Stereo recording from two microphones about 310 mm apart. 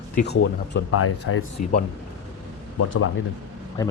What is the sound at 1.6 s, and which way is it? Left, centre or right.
Speech, left.